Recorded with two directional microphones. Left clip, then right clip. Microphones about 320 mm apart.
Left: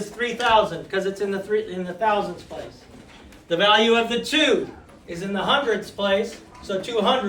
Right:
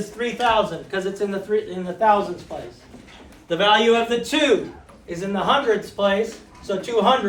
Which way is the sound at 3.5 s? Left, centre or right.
Right.